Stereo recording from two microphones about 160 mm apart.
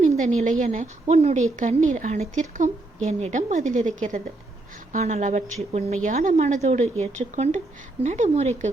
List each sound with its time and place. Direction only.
0.2 s a woman's voice: 50° right (ahead or behind)